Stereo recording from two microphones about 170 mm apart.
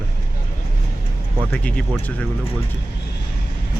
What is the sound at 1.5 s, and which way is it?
Speech, 5° left (ahead or behind).